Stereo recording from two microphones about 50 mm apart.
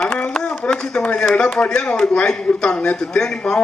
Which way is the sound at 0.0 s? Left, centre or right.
Centre.